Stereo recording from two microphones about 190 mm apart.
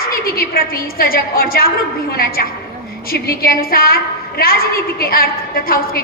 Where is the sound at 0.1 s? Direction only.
50° left (ahead or behind).